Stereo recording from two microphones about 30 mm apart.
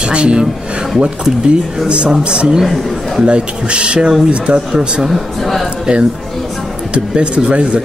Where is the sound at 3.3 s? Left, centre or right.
Right.